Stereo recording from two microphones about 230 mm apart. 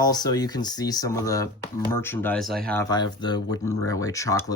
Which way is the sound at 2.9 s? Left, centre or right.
Centre.